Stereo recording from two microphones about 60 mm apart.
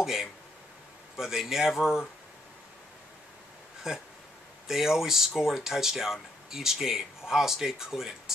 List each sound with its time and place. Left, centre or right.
0.0 s speech: centre
3.9 s speech: centre